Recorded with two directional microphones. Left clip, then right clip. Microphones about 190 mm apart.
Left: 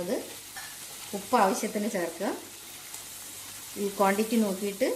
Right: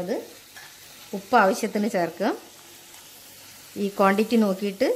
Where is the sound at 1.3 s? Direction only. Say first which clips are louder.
Right 5 dB; 50° right (ahead or behind).